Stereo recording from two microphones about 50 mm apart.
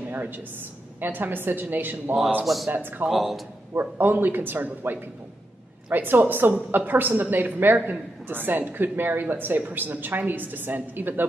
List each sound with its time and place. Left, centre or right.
1.0 s a woman's voice: right
2.4 s speech: centre
2.7 s a woman's voice: right
3.1 s speech: centre
4.0 s a woman's voice: right
5.9 s a woman's voice: right